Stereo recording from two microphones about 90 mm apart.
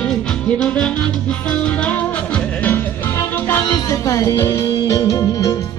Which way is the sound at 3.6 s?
45° left (ahead or behind).